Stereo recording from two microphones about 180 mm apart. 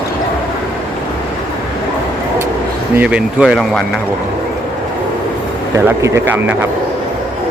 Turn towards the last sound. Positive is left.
turn(degrees=-10)  # may be behind; listen again after turning